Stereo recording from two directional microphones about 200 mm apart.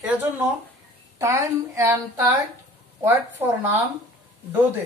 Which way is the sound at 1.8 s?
10° right (ahead or behind).